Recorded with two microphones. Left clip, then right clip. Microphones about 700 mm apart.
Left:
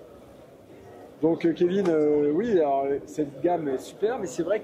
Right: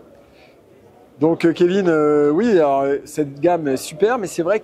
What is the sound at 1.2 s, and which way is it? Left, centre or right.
Speech, right.